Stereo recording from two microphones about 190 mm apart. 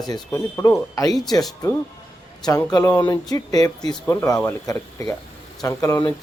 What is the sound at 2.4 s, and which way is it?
Speech, 15° left (ahead or behind).